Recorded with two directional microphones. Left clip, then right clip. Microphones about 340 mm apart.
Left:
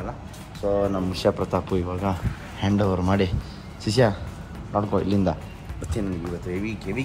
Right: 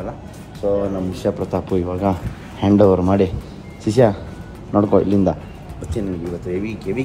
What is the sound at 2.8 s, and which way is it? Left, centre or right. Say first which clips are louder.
Speech: right 10 dB; centre.